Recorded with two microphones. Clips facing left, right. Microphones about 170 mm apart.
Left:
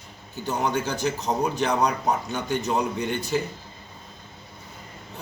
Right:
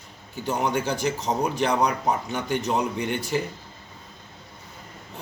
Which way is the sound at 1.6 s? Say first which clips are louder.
Right 1 dB; 10° right (ahead or behind).